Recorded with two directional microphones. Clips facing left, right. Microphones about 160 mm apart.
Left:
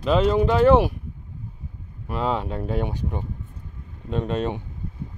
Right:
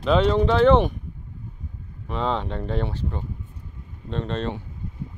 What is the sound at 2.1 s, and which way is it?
Speech, 5° left (ahead or behind).